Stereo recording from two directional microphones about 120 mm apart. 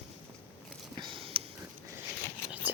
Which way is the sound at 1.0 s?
45° right (ahead or behind).